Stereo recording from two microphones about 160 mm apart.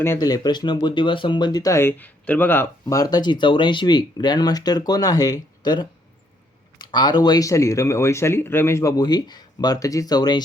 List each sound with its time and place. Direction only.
0.0 s speech: 20° left (ahead or behind)